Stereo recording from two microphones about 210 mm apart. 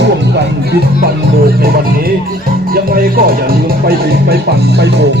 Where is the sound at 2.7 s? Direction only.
45° right (ahead or behind).